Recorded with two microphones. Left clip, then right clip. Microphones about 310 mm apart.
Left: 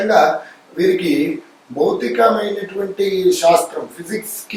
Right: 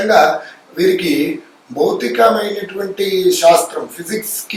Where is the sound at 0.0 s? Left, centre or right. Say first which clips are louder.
Right 2 dB; centre.